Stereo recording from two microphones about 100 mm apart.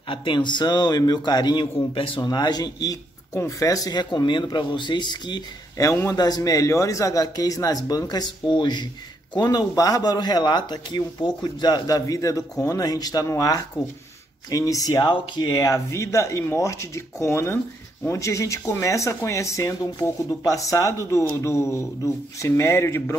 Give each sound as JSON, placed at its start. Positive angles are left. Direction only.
{"t": 0.1, "sound": "a man's voice", "side_deg": 55}
{"t": 2.2, "sound": "a man's voice", "side_deg": 45}
{"t": 5.8, "sound": "a man's voice", "side_deg": 35}